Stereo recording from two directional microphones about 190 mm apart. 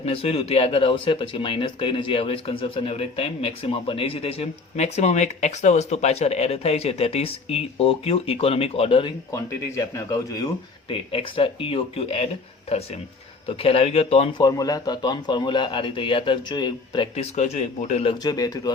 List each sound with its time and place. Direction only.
0.0 s speech: 30° left (ahead or behind)
9.3 s a man's voice: 15° left (ahead or behind); by 14.4 s 30° left (ahead or behind)
14.4 s a man's voice: 20° left (ahead or behind)